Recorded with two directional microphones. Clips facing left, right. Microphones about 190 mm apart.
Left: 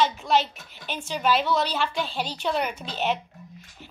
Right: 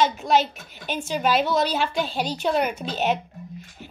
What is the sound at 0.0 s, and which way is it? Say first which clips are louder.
A woman's voice: right 2 dB; 45° right (ahead or behind).